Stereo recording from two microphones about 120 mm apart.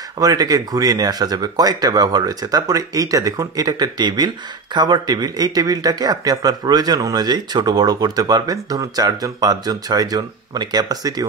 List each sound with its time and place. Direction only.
0.2 s speech: 30° right (ahead or behind)